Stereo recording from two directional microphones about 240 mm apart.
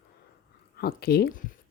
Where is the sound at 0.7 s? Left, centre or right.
Left.